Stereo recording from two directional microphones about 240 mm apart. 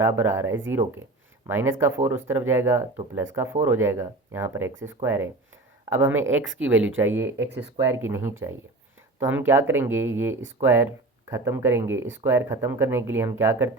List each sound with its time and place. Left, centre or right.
0.0 s speech: centre
6.2 s speech: right
7.0 s speech: centre